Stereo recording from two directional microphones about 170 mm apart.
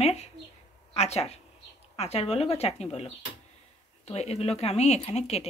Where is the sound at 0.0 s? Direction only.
40° left (ahead or behind).